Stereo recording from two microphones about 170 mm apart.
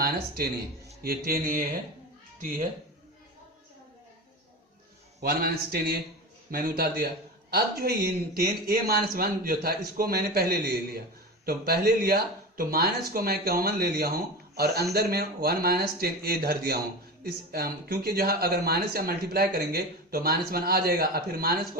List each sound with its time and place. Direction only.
1.0 s speech: 65° right (ahead or behind)
5.2 s speech: 60° right (ahead or behind)